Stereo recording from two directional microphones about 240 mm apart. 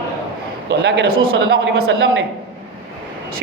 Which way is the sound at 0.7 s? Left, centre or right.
Right.